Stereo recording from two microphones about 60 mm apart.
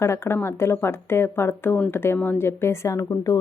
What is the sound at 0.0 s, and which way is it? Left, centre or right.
A woman's voice, left.